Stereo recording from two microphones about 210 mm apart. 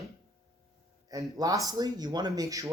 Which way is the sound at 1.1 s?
15° right (ahead or behind).